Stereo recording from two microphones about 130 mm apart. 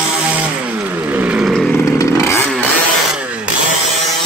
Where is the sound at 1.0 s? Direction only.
10° right (ahead or behind).